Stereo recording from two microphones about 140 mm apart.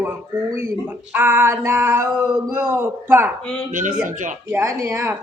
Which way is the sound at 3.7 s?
70° right (ahead or behind).